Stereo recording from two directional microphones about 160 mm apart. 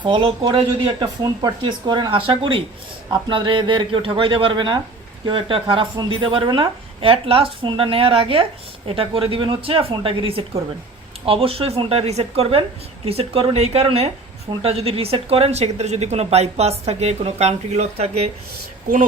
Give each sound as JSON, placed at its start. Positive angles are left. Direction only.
{"t": 0.0, "sound": "a woman's voice", "side_deg": -30}